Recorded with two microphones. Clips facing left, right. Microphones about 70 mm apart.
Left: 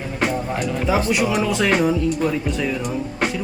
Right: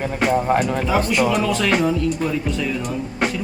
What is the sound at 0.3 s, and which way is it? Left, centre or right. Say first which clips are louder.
Speech: right 7 dB; right.